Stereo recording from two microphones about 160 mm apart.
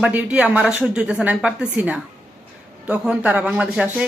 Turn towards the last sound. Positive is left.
turn(degrees=-5)  # may be behind; listen again after turning